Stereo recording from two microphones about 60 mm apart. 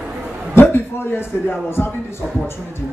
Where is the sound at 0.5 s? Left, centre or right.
Left.